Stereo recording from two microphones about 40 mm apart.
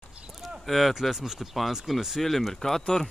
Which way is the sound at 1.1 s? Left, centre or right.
Centre.